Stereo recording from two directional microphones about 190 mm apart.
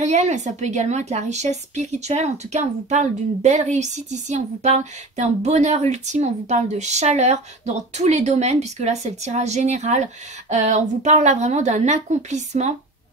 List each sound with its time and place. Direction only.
0.0 s speech: 35° right (ahead or behind)